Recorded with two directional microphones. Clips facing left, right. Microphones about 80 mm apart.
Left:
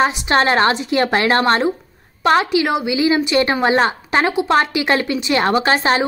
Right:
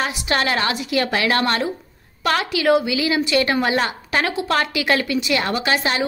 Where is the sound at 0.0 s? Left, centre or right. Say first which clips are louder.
Left 6 dB; left.